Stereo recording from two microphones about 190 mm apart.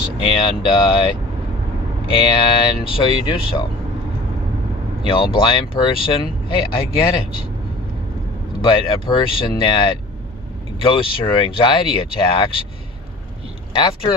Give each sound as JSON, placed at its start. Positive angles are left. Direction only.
{"t": 0.3, "sound": "speech", "side_deg": 25}
{"t": 2.1, "sound": "speech", "side_deg": 25}
{"t": 5.0, "sound": "speech", "side_deg": 25}
{"t": 8.6, "sound": "speech", "side_deg": 25}
{"t": 10.8, "sound": "speech", "side_deg": 25}
{"t": 13.7, "sound": "speech", "side_deg": 25}